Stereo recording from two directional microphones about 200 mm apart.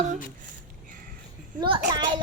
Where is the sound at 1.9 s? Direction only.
20° right (ahead or behind).